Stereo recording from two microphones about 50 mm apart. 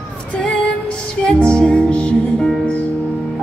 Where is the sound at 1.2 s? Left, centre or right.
Left.